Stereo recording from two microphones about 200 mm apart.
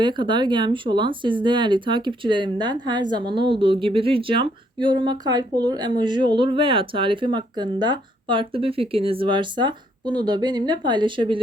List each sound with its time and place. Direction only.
0.0 s speech: 25° right (ahead or behind)